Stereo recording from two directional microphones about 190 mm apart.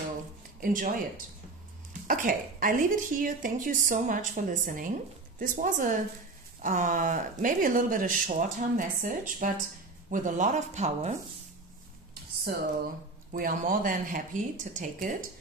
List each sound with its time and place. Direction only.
0.6 s speech: 45° right (ahead or behind)
2.0 s speech: 45° right (ahead or behind)
13.3 s speech: 45° right (ahead or behind)